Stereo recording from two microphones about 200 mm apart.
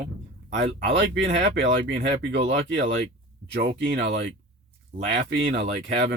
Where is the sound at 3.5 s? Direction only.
60° right (ahead or behind).